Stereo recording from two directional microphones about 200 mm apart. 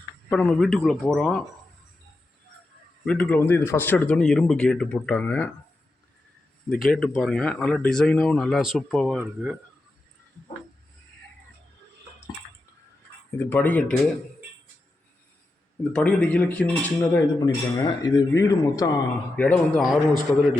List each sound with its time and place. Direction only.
0.3 s speech: 5° left (ahead or behind)
3.1 s speech: 5° left (ahead or behind)
6.7 s speech: centre (ahead or behind)
13.4 s speech: 10° left (ahead or behind)
15.8 s speech: 5° left (ahead or behind)
17.4 s speech: 20° left (ahead or behind)
19.4 s speech: 5° left (ahead or behind)